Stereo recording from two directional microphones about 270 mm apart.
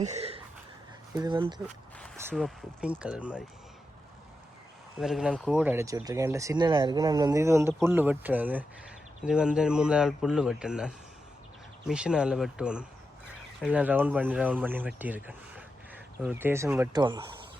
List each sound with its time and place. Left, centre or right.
0.0 s a sound: right
1.1 s speech: centre
1.6 s speech: centre
4.9 s speech: centre